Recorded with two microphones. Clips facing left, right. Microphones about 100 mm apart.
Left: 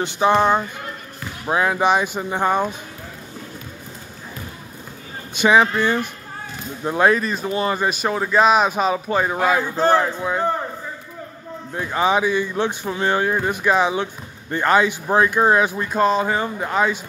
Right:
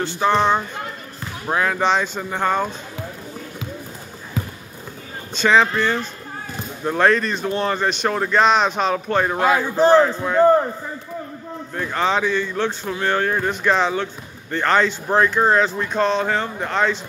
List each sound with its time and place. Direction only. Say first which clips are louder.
0.0 s speech: left 1 dB; 15° left (ahead or behind)
5.3 s speech: left 1 dB; 10° left (ahead or behind)
11.7 s speech: left 2 dB; 10° left (ahead or behind)